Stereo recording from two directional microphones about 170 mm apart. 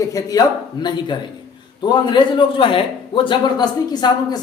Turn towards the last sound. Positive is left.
turn(degrees=25)  # may be behind; listen again after turning